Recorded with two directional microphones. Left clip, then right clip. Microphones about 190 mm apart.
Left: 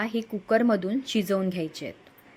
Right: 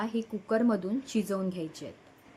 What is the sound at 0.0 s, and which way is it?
A woman's voice, 10° left (ahead or behind).